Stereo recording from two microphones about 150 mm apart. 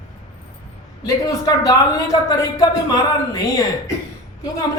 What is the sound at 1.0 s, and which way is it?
A man's voice, 25° left (ahead or behind).